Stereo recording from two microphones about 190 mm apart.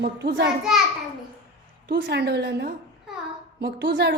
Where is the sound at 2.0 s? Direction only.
60° right (ahead or behind).